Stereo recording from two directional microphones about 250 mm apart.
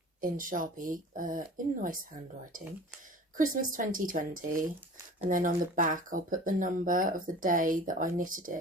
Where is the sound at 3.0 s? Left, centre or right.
Right.